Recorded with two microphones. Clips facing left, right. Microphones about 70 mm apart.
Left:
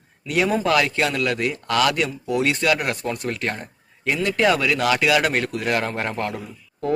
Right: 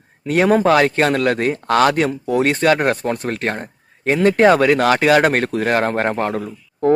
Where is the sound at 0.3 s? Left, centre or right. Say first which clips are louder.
Right 6 dB; right.